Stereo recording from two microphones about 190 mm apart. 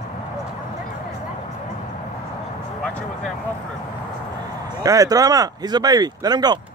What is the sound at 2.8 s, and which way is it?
Speech, 5° left (ahead or behind).